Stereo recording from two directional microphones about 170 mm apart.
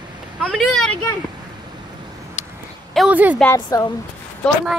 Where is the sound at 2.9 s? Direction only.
5° right (ahead or behind).